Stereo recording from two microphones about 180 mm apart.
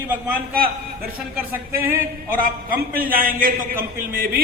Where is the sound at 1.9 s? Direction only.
50° right (ahead or behind).